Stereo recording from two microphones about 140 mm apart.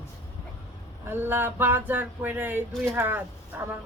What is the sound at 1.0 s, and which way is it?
Speech, 15° right (ahead or behind).